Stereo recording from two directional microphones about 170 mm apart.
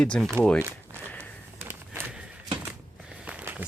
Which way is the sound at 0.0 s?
5° left (ahead or behind).